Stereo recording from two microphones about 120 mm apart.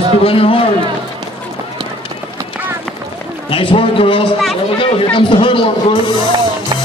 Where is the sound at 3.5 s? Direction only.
45° left (ahead or behind).